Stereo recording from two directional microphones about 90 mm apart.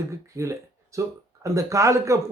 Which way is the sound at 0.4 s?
35° right (ahead or behind).